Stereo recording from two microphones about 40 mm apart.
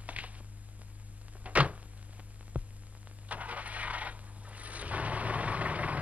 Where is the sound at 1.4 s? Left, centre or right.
Right.